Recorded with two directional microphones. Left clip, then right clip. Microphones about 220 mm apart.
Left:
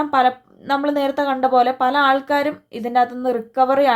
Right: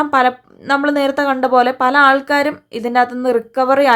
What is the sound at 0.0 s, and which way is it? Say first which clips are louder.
Speech: right 3 dB; 20° right (ahead or behind).